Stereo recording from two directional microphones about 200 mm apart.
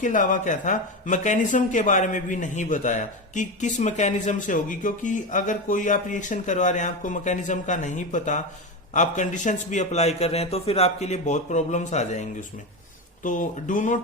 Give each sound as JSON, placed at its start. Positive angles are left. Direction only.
{"t": 0.0, "sound": "speech", "side_deg": 40}